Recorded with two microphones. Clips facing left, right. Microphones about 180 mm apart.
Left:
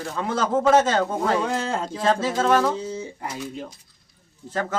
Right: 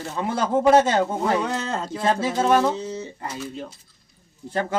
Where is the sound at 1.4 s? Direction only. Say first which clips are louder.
Left 1 dB; 10° left (ahead or behind).